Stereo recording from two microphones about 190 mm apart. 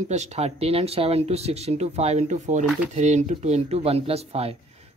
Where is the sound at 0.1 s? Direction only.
35° right (ahead or behind).